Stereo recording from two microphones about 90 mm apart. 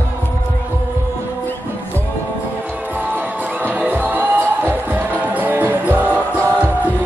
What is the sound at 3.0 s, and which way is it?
Music, 20° right (ahead or behind).